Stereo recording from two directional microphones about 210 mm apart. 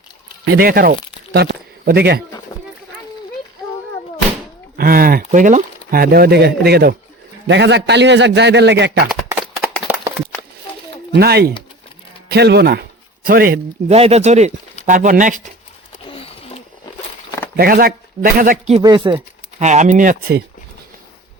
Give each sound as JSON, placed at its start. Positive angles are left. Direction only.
{"t": 0.5, "sound": "speech", "side_deg": -45}
{"t": 2.5, "sound": "a sound", "side_deg": 15}
{"t": 4.8, "sound": "a man's voice", "side_deg": -45}
{"t": 11.1, "sound": "speech", "side_deg": -50}
{"t": 13.9, "sound": "speech", "side_deg": -30}
{"t": 16.0, "sound": "a sound", "side_deg": 25}
{"t": 17.6, "sound": "speech", "side_deg": -45}
{"t": 18.8, "sound": "speech", "side_deg": -20}